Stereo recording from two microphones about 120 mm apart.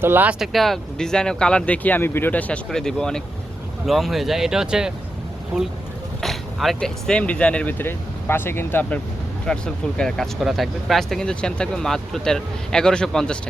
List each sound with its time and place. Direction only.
0.0 s speech: 15° right (ahead or behind)
0.3 s speech: centre (ahead or behind)
6.2 s speech: centre (ahead or behind)